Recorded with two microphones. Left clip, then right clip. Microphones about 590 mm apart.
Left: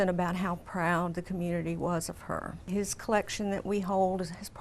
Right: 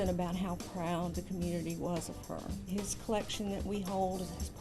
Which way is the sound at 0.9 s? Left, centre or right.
Left.